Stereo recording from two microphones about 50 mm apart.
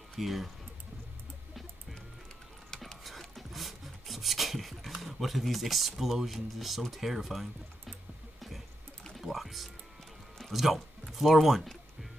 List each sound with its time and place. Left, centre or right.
0.2 s speech: centre
2.7 s rub: centre
4.9 s speech: centre
8.4 s a sound: centre
9.1 s music: centre
10.5 s speech: centre